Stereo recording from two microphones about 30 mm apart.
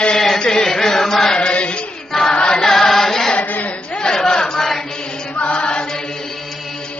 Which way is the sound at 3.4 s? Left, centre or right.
Left.